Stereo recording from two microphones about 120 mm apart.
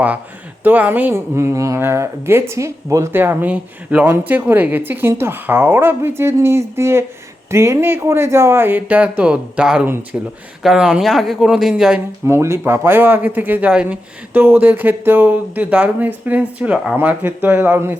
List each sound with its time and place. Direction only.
0.6 s speech: 15° right (ahead or behind)
9.8 s speech: 20° right (ahead or behind)
10.6 s speech: 5° right (ahead or behind)
12.2 s speech: 20° right (ahead or behind)